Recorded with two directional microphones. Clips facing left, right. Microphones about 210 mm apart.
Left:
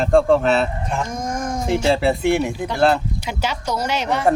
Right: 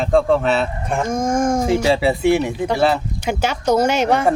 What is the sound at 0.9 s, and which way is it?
Speech, 50° right (ahead or behind).